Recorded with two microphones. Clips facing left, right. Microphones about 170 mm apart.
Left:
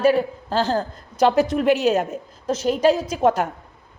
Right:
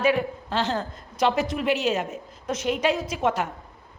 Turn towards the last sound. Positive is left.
turn(degrees=40)  # may be behind; listen again after turning